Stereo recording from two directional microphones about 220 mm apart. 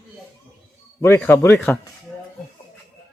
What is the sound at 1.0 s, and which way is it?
Speech, 10° left (ahead or behind).